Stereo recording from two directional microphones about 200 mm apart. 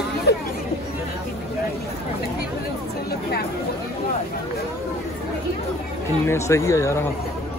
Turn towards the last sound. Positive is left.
turn(degrees=15)  # may be behind; listen again after turning